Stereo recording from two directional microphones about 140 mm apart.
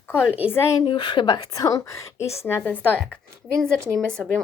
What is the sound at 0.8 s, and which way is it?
A woman's voice, 35° left (ahead or behind).